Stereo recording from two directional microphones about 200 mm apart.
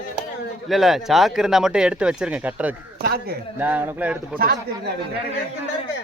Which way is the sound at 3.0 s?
50° right (ahead or behind).